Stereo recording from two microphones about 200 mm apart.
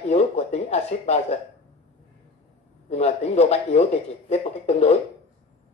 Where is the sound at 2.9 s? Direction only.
35° left (ahead or behind).